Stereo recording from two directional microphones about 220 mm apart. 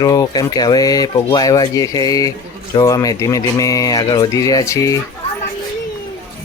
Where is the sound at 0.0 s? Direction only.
15° left (ahead or behind).